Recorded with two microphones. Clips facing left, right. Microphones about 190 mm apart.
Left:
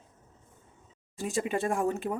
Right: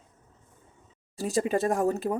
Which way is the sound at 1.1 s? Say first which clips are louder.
Right 4 dB; 35° right (ahead or behind).